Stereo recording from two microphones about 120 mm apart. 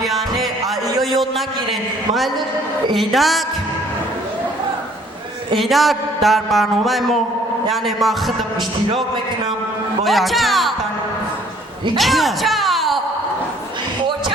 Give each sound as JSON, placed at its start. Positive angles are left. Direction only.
{"t": 0.0, "sound": "music", "side_deg": 0}
{"t": 0.6, "sound": "a sound", "side_deg": -30}
{"t": 2.9, "sound": "speech", "side_deg": 0}
{"t": 5.5, "sound": "speech", "side_deg": 0}
{"t": 10.0, "sound": "speech", "side_deg": 0}
{"t": 11.9, "sound": "speech", "side_deg": 0}